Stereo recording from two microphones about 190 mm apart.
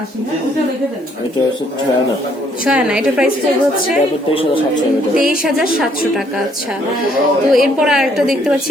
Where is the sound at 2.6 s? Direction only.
5° right (ahead or behind).